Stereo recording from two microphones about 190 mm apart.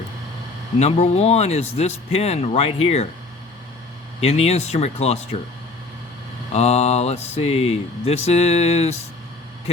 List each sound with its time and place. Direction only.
0.8 s speech: 35° left (ahead or behind)
4.2 s speech: 35° left (ahead or behind)
6.5 s speech: 35° left (ahead or behind)